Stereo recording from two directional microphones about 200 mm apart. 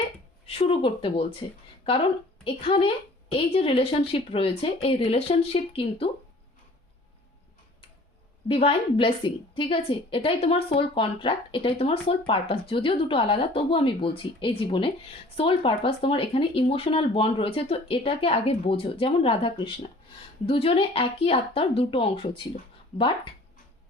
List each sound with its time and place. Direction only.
0.4 s a woman's voice: 30° left (ahead or behind)
2.4 s a woman's voice: 25° left (ahead or behind)
8.4 s a woman's voice: 30° left (ahead or behind)